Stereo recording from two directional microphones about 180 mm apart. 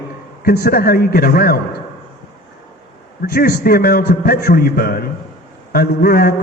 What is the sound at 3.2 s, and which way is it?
A man's voice, 55° left (ahead or behind).